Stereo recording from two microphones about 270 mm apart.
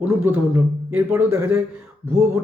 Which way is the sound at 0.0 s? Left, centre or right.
Centre.